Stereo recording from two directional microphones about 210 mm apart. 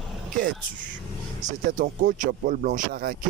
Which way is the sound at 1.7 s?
40° right (ahead or behind).